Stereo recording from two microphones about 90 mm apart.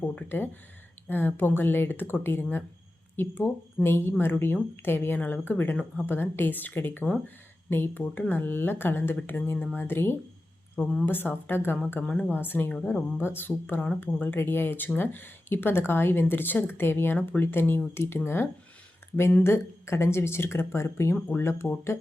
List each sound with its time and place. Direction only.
0.0 s speech: 20° left (ahead or behind)
12.7 s a woman's voice: 10° left (ahead or behind)
13.1 s speech: 25° left (ahead or behind)